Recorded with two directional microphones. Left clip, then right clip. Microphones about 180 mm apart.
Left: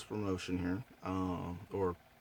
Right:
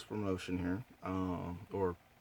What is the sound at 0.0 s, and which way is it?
Speech, 10° right (ahead or behind).